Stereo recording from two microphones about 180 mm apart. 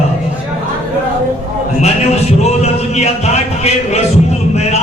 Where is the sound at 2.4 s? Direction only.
35° left (ahead or behind).